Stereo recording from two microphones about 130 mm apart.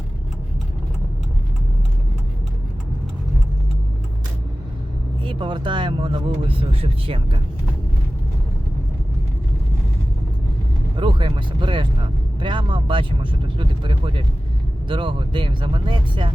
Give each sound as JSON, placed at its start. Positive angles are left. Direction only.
{"t": 5.2, "sound": "speech", "side_deg": -40}
{"t": 10.9, "sound": "speech", "side_deg": -40}